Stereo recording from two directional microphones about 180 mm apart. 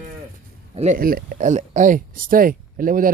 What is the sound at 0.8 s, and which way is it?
Speech, 45° right (ahead or behind).